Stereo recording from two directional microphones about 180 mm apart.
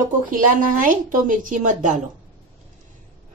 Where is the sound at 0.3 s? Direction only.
50° right (ahead or behind).